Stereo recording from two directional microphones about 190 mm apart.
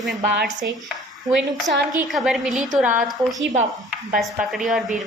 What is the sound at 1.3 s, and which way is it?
A woman's voice, centre (ahead or behind).